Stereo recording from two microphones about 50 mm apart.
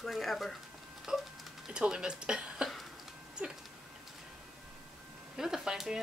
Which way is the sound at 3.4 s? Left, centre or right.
Right.